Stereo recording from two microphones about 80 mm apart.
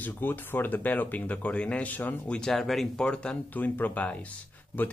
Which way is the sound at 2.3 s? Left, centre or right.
Centre.